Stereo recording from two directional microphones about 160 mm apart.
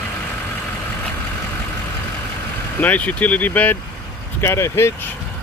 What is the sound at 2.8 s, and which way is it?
Speech, 10° left (ahead or behind).